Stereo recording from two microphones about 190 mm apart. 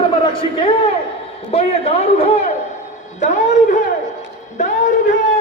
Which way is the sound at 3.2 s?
40° left (ahead or behind).